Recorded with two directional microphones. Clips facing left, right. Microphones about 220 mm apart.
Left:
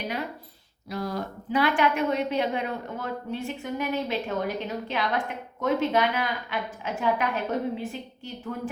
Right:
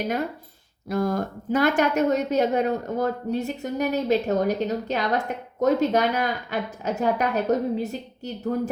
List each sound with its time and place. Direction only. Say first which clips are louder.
0.9 s a woman's voice: right 7 dB; 50° right (ahead or behind)